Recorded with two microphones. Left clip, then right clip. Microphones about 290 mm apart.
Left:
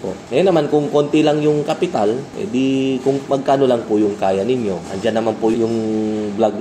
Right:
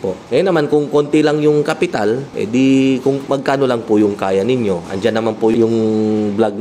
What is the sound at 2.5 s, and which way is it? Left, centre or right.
Speech, right.